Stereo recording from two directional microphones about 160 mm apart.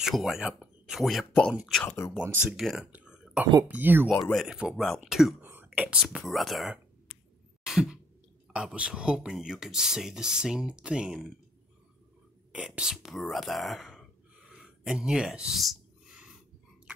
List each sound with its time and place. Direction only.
0.0 s speech: centre (ahead or behind)
1.9 s speech: 15° left (ahead or behind)
2.4 s speech: 5° right (ahead or behind)
4.2 s speech: centre (ahead or behind)
7.6 s a sound: 5° right (ahead or behind)
8.5 s speech: 5° right (ahead or behind)
12.5 s speech: 5° right (ahead or behind)